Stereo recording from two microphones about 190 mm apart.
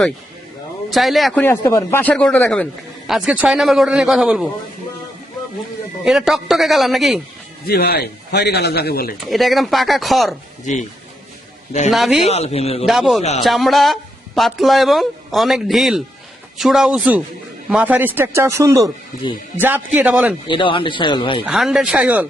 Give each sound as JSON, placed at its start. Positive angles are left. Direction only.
{"t": 0.9, "sound": "speech", "side_deg": 0}
{"t": 3.1, "sound": "speech", "side_deg": -5}
{"t": 6.1, "sound": "speech", "side_deg": 0}
{"t": 7.7, "sound": "speech", "side_deg": 55}
{"t": 9.3, "sound": "speech", "side_deg": 0}
{"t": 11.9, "sound": "speech", "side_deg": 0}
{"t": 12.2, "sound": "a man's voice", "side_deg": 35}
{"t": 12.8, "sound": "speech", "side_deg": 0}
{"t": 20.5, "sound": "speech", "side_deg": 25}
{"t": 21.4, "sound": "speech", "side_deg": 0}